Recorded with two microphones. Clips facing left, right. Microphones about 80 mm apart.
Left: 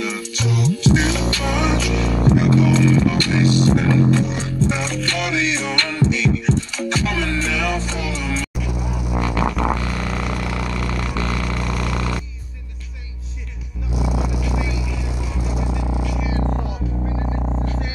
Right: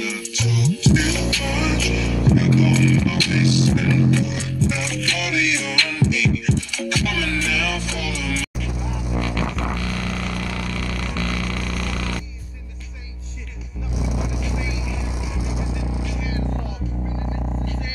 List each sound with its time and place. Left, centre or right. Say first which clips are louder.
0.0 s music: left 2 dB; left
9.1 s music: left 4 dB; centre
9.7 s vehicle: left 3 dB; left
14.4 s vehicle: left 3 dB; centre
16.0 s a sound: left 4 dB; centre
17.2 s a sound: left 3 dB; left